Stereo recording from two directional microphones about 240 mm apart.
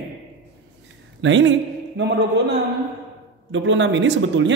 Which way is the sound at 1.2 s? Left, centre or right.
Right.